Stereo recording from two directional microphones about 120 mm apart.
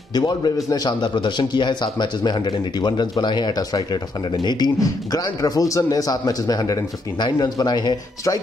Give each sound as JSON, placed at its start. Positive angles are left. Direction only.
{"t": 0.1, "sound": "a man's voice", "side_deg": 35}